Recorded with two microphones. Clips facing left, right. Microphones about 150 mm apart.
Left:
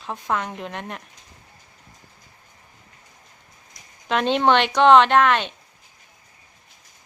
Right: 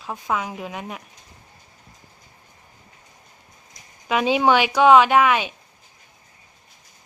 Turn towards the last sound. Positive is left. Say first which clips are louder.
# even
turn(degrees=-5)  # may be behind; listen again after turning